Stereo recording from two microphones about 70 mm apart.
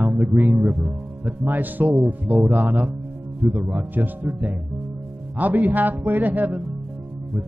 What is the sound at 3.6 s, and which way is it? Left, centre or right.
Speech, right.